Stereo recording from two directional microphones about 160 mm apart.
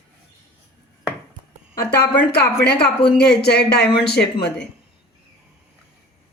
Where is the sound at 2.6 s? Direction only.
90° left.